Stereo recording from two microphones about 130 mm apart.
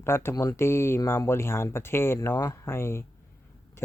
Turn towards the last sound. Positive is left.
turn(degrees=20)  # may be behind; listen again after turning